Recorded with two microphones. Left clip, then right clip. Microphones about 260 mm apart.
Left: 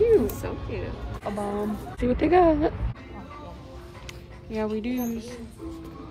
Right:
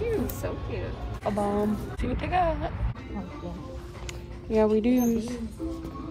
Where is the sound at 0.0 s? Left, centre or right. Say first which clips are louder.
Left 9 dB; left.